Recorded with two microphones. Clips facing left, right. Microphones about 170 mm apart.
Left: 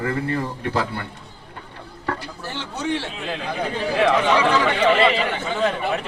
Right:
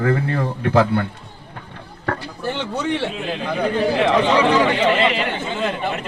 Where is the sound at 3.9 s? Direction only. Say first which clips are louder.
Left 1 dB; 20° right (ahead or behind).